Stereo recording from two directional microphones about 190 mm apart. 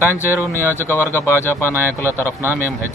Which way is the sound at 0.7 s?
15° left (ahead or behind).